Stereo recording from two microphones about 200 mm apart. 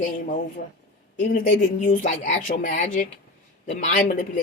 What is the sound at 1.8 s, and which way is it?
Speech, 40° left (ahead or behind).